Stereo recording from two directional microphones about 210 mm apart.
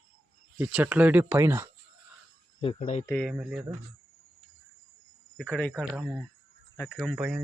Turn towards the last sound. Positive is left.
turn(degrees=-5)  # may be behind; listen again after turning